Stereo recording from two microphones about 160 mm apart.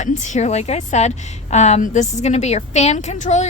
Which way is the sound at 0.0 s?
50° left (ahead or behind).